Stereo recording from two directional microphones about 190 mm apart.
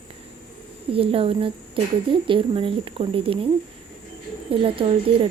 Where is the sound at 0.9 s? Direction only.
30° right (ahead or behind).